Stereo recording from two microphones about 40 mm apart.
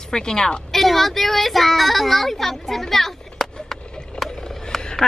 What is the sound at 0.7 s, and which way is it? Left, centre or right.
A woman's voice, centre.